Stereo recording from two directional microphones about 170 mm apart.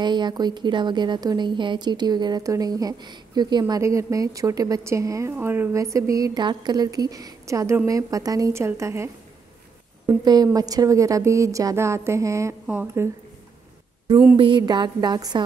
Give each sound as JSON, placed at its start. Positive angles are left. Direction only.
{"t": 0.0, "sound": "a woman's voice", "side_deg": -25}
{"t": 14.3, "sound": "a woman's voice", "side_deg": -30}